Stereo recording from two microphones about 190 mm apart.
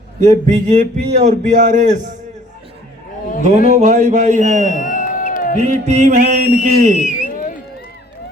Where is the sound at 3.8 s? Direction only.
40° right (ahead or behind).